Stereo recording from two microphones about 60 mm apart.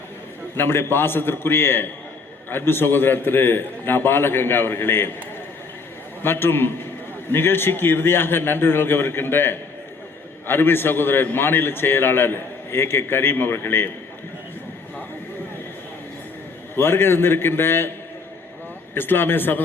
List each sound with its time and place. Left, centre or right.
0.5 s a man's voice: left
6.2 s a man's voice: left
16.7 s a man's voice: left
18.9 s a man's voice: left